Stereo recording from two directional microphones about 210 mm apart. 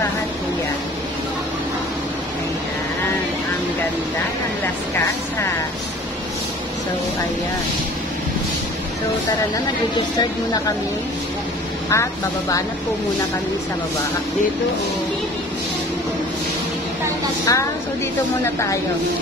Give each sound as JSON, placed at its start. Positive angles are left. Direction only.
{"t": 11.9, "sound": "speech", "side_deg": 15}
{"t": 17.5, "sound": "speech", "side_deg": 15}